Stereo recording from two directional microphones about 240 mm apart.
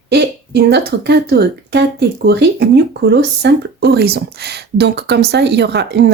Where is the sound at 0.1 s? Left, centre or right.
Right.